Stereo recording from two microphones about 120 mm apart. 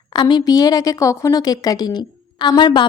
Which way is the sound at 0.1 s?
40° left (ahead or behind).